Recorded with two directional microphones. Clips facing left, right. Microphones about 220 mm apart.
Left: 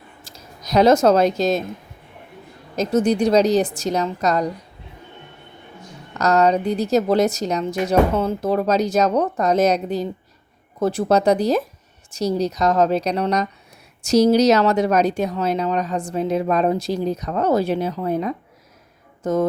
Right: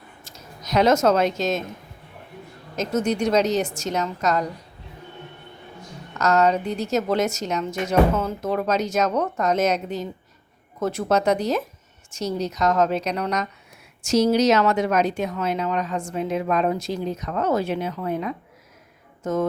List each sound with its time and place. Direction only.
0.3 s a sound: 35° left (ahead or behind)
0.6 s speech: 35° left (ahead or behind)
2.7 s speech: 35° left (ahead or behind)
6.1 s speech: 35° left (ahead or behind)